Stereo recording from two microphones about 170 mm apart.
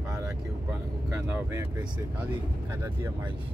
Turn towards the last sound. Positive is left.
turn(degrees=-15)  # may be behind; listen again after turning